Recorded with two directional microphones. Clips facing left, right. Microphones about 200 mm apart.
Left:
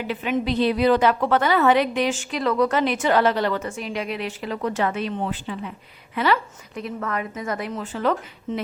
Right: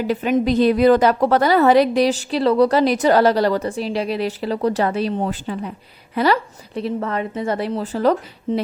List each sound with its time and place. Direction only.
0.0 s a woman's voice: 40° right (ahead or behind)